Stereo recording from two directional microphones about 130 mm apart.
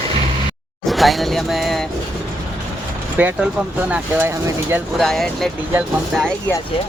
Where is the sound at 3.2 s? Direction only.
10° right (ahead or behind).